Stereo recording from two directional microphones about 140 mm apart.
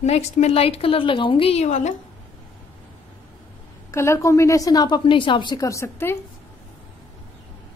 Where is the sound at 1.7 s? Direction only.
60° left (ahead or behind).